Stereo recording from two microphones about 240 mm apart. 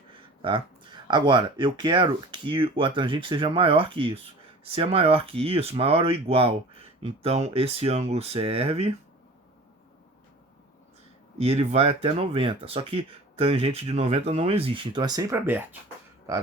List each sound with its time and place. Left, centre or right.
0.1 s speech: right
11.3 s speech: right